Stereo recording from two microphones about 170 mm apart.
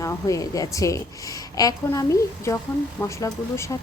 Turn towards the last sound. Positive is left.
turn(degrees=15)  # may be behind; listen again after turning